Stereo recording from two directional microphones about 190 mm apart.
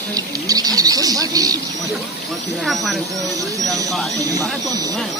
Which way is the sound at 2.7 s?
Centre (ahead or behind).